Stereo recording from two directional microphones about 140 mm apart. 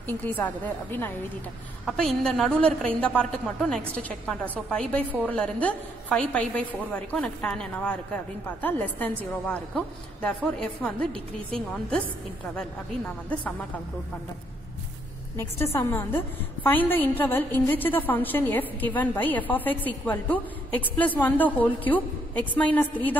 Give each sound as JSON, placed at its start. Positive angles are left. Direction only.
{"t": 0.0, "sound": "a woman's voice", "side_deg": 10}
{"t": 1.9, "sound": "a woman's voice", "side_deg": 5}
{"t": 15.3, "sound": "a woman's voice", "side_deg": 20}